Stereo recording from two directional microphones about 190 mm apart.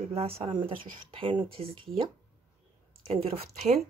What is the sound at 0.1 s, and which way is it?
Speech, 30° right (ahead or behind).